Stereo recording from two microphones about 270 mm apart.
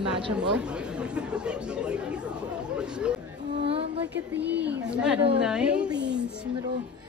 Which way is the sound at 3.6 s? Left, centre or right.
Right.